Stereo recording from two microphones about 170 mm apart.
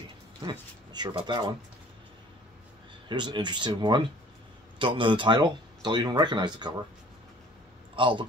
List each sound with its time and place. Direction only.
0.5 s speech: 25° right (ahead or behind)
3.1 s speech: 25° right (ahead or behind)
7.9 s speech: 30° right (ahead or behind)